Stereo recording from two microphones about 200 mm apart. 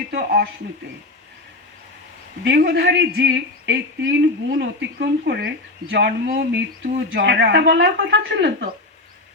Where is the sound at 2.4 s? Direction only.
55° right (ahead or behind).